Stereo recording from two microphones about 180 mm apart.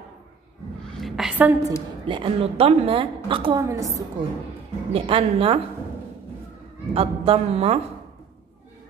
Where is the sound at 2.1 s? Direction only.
30° right (ahead or behind).